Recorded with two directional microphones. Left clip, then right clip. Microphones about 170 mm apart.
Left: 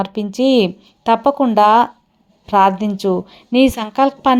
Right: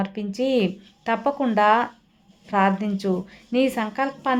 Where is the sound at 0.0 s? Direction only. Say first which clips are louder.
Left 8 dB; 30° left (ahead or behind).